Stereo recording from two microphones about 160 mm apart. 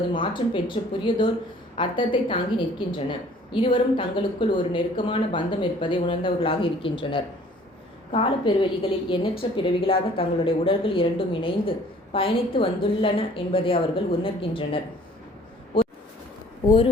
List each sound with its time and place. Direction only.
0.2 s a woman's voice: 30° left (ahead or behind)